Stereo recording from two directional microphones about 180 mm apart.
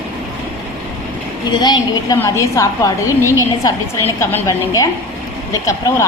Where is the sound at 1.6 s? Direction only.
25° left (ahead or behind).